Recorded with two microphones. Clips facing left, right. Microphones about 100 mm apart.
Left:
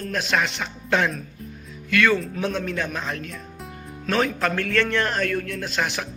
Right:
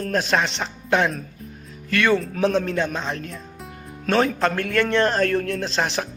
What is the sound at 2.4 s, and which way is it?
Speech, 35° right (ahead or behind).